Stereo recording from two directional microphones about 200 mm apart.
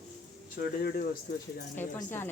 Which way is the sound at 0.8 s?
50° left (ahead or behind).